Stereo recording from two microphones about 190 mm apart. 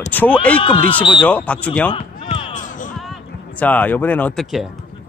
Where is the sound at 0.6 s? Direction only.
25° left (ahead or behind).